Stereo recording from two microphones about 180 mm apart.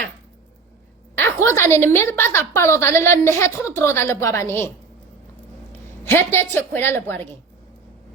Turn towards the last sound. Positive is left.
turn(degrees=15)  # may be behind; listen again after turning